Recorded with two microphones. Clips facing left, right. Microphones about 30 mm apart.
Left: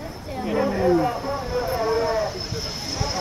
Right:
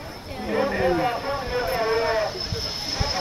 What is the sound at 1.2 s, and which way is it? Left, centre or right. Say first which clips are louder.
Vehicle: even; right.